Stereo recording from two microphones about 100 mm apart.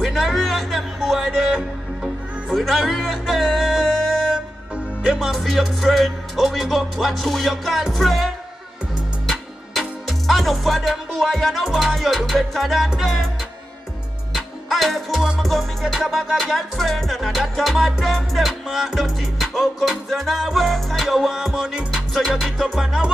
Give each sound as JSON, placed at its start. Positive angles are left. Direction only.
{"t": 0.0, "sound": "music", "side_deg": 0}
{"t": 14.3, "sound": "music", "side_deg": 0}